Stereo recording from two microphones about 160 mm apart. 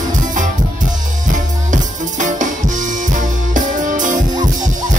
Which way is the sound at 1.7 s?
50° right (ahead or behind).